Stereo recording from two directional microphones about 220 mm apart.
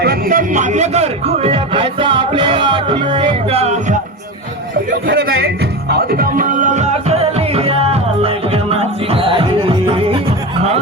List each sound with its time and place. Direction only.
0.0 s music: 40° right (ahead or behind)
5.0 s music: 45° right (ahead or behind); by 10.2 s 25° right (ahead or behind)